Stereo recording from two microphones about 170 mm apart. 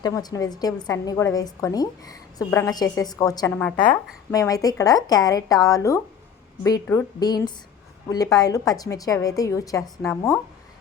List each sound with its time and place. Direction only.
0.0 s a woman's voice: 25° left (ahead or behind)
3.5 s speech: 5° left (ahead or behind)
4.3 s a woman's voice: 20° left (ahead or behind)